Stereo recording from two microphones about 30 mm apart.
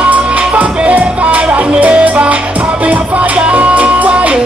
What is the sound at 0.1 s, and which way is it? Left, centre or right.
Music, right.